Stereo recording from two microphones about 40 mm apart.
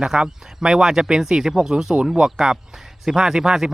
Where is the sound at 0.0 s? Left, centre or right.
Centre.